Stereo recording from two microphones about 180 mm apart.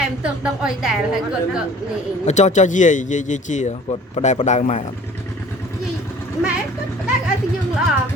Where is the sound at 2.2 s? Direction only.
40° left (ahead or behind).